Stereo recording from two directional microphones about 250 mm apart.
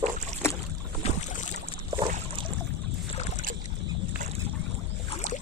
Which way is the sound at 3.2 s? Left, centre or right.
Left.